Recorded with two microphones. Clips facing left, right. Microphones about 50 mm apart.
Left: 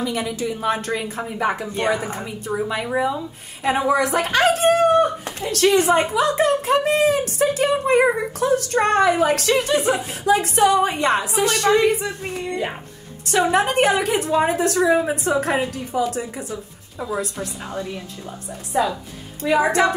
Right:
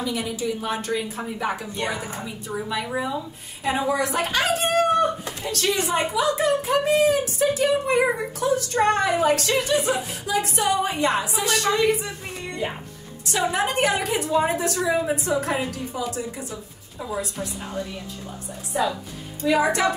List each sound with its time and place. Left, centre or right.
0.0 s a woman's voice: left
3.6 s a woman's voice: left
19.4 s a woman's voice: left